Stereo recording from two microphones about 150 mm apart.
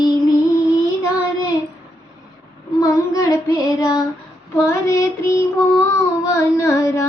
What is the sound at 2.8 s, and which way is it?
Child singing, 20° left (ahead or behind).